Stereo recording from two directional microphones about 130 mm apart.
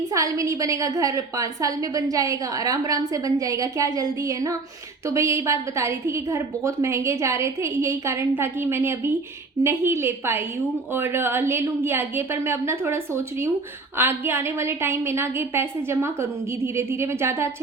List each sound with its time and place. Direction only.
0.1 s a woman's voice: 25° right (ahead or behind)